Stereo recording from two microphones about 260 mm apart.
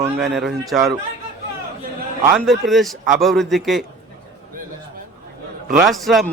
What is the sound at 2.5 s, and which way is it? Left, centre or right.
A man's voice, centre.